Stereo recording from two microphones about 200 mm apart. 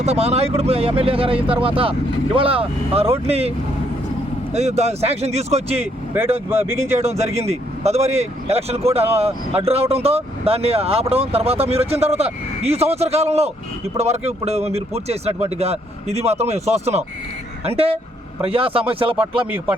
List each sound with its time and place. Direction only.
0.0 s speech: 30° right (ahead or behind)
4.5 s speech: 35° right (ahead or behind)
6.1 s speech: 10° right (ahead or behind)
7.1 s speech: 30° right (ahead or behind)